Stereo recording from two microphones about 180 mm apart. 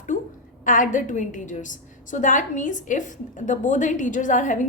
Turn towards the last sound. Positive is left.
turn(degrees=45)  # may be behind; listen again after turning